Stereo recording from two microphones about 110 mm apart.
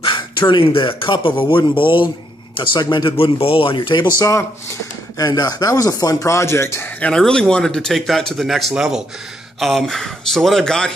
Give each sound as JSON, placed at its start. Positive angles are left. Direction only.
{"t": 0.0, "sound": "speech", "side_deg": 50}
{"t": 4.2, "sound": "speech", "side_deg": 25}
{"t": 7.1, "sound": "speech", "side_deg": 5}